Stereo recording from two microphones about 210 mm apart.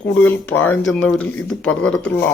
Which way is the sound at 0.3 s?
10° left (ahead or behind).